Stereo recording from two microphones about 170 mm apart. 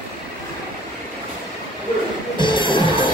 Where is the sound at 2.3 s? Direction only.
30° left (ahead or behind).